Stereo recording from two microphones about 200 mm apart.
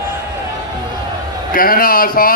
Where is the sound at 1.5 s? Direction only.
45° left (ahead or behind).